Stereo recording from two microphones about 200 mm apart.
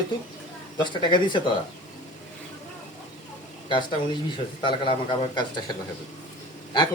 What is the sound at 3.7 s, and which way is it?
A man's voice, 20° left (ahead or behind).